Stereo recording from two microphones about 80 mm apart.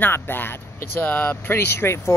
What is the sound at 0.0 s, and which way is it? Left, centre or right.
Speech, left.